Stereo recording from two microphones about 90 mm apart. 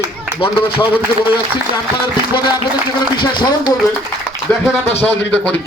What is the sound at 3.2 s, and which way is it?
Speech, 60° left (ahead or behind).